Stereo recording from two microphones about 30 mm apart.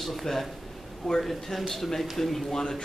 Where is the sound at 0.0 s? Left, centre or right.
Centre.